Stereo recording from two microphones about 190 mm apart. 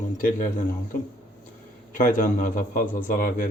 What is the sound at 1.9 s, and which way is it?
Speech, 45° left (ahead or behind).